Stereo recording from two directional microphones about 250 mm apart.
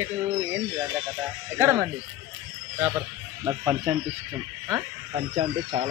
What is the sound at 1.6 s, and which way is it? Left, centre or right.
Speech, centre.